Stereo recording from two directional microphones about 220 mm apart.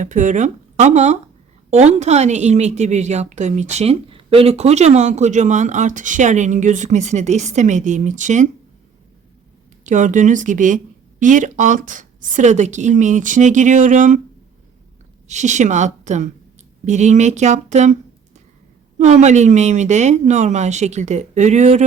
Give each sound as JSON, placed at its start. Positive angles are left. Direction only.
{"t": 0.0, "sound": "a woman's voice", "side_deg": -35}
{"t": 9.8, "sound": "a woman's voice", "side_deg": -35}
{"t": 15.3, "sound": "a woman's voice", "side_deg": -35}
{"t": 18.9, "sound": "a woman's voice", "side_deg": -30}